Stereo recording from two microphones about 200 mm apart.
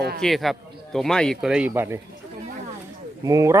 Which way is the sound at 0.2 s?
Centre (ahead or behind).